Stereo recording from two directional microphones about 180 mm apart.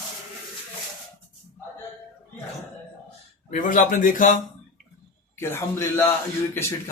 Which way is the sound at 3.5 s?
45° left (ahead or behind).